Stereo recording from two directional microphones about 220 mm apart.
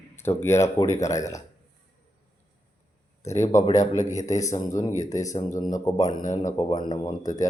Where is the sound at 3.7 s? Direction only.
35° left (ahead or behind).